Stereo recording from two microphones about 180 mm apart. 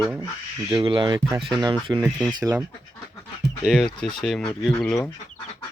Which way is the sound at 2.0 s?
5° right (ahead or behind).